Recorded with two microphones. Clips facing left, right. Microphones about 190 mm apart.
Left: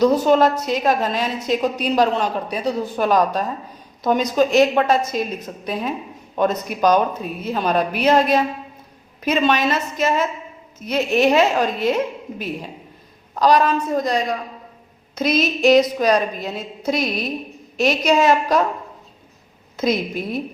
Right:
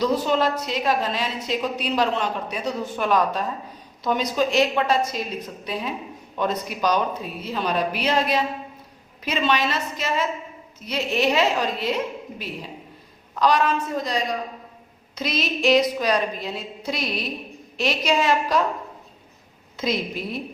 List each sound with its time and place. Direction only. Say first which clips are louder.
0.0 s a woman's voice: left 6 dB; 45° left (ahead or behind)
13.4 s a woman's voice: left 4 dB; 40° left (ahead or behind)
19.7 s a woman's voice: left 5 dB; 45° left (ahead or behind)